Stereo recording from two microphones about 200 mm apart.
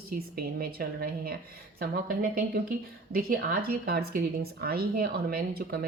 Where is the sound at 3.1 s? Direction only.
50° right (ahead or behind).